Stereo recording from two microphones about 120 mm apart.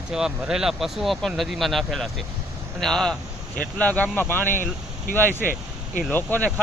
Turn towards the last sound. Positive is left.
turn(degrees=15)  # may be behind; listen again after turning